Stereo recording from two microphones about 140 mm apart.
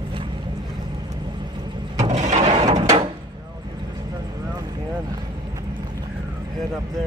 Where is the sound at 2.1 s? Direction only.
55° right (ahead or behind).